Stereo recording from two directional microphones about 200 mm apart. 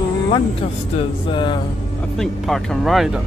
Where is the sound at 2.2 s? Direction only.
Centre (ahead or behind).